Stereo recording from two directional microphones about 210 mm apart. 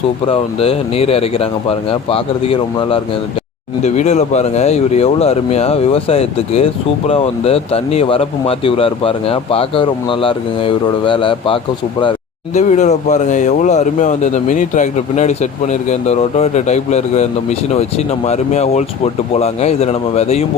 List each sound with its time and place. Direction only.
0.3 s speech: 25° left (ahead or behind)